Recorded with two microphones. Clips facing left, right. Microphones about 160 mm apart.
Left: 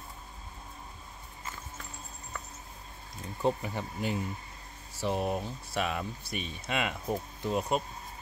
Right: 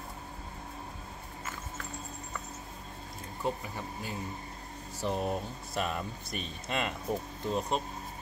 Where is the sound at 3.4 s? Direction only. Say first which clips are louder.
Left 5 dB; 25° left (ahead or behind).